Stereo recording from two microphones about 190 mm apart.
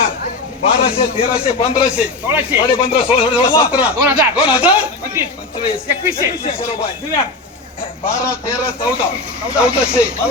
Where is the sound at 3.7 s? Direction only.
5° right (ahead or behind).